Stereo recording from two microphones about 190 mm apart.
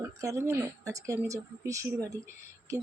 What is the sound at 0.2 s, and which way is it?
A woman's voice, 15° right (ahead or behind).